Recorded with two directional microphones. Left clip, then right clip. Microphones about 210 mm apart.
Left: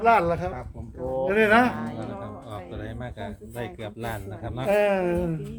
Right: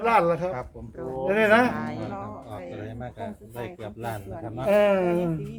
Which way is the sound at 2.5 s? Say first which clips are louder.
Even; 35° left (ahead or behind).